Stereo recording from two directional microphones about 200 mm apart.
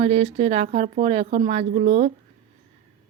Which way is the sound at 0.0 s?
30° right (ahead or behind).